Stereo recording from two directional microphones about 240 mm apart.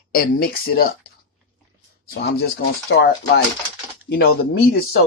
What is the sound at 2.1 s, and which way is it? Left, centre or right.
Speech, left.